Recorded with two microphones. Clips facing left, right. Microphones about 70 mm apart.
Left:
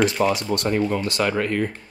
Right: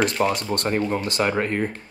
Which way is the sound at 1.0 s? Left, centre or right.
Right.